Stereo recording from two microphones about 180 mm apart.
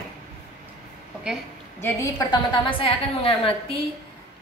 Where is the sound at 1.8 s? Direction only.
20° left (ahead or behind).